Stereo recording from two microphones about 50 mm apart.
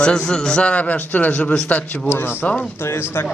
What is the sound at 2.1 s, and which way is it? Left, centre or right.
Speech, left.